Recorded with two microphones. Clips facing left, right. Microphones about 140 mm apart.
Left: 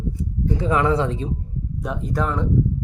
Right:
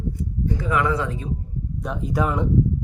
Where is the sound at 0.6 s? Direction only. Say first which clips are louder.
Left 4 dB; 30° left (ahead or behind).